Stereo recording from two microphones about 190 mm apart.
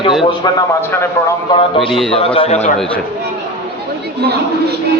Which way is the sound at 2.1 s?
30° left (ahead or behind).